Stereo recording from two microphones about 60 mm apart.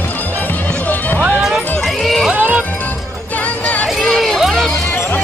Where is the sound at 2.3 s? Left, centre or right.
Right.